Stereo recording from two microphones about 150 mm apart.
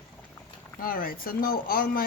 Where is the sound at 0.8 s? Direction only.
70° left (ahead or behind).